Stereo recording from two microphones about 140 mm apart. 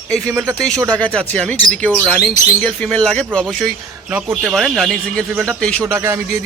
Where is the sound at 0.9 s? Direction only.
5° left (ahead or behind).